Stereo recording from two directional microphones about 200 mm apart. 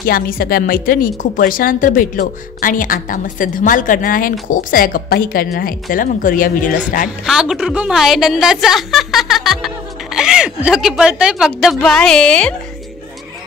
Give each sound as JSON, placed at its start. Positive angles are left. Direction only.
{"t": 0.0, "sound": "speech", "side_deg": 45}
{"t": 7.2, "sound": "a woman's voice", "side_deg": -5}